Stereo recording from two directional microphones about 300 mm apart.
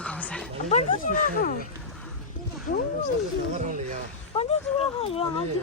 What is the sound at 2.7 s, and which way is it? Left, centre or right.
Speech, left.